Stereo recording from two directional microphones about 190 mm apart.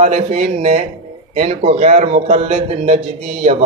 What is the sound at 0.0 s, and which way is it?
A man's voice, 35° right (ahead or behind).